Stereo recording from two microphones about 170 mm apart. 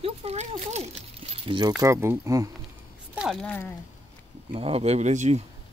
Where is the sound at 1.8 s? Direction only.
15° right (ahead or behind).